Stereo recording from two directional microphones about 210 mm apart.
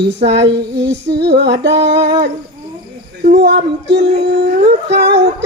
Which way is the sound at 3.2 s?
55° right (ahead or behind).